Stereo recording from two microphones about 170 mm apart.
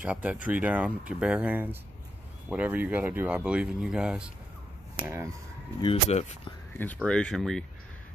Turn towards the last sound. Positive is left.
turn(degrees=5)  # may be behind; listen again after turning